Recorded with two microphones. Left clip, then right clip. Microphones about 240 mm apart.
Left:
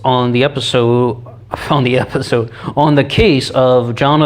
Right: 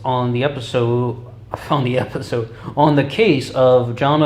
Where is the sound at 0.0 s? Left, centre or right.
Left.